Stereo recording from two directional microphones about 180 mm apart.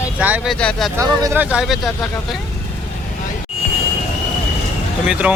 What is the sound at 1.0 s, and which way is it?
Speech, 15° right (ahead or behind).